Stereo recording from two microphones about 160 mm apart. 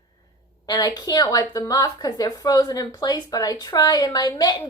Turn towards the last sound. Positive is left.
turn(degrees=25)  # may be behind; listen again after turning